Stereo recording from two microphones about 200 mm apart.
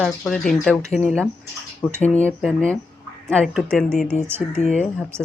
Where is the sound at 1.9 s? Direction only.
35° left (ahead or behind).